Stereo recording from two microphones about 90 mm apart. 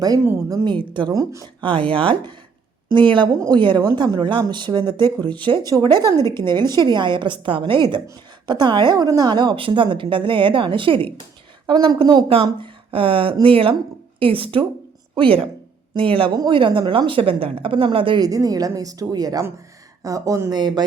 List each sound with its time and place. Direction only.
0.4 s a woman's voice: 45° right (ahead or behind)
0.7 s a woman's voice: 60° right (ahead or behind)
1.1 s speech: 35° right (ahead or behind)
1.6 s a woman's voice: 65° right (ahead or behind)
3.5 s a woman's voice: 60° right (ahead or behind)
11.6 s a woman's voice: 55° right (ahead or behind)
12.3 s speech: 80° right
16.0 s speech: 85° right
16.5 s a woman's voice: 70° right (ahead or behind)
17.1 s speech: 85° right
18.2 s a woman's voice: 40° right (ahead or behind)
20.6 s a woman's voice: 50° right (ahead or behind)